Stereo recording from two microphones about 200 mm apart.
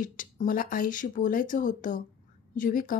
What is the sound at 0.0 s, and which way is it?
A woman's voice, 40° left (ahead or behind).